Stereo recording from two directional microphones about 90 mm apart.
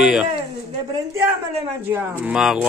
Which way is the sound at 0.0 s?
10° right (ahead or behind).